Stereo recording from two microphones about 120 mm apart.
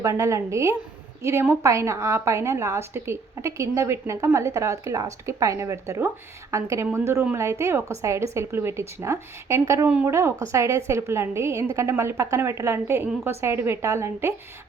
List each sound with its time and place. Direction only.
0.0 s a woman's voice: 25° right (ahead or behind)